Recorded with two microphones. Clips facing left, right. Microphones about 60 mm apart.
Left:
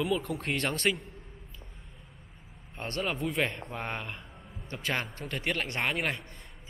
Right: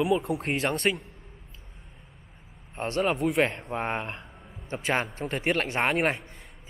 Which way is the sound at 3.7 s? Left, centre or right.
Right.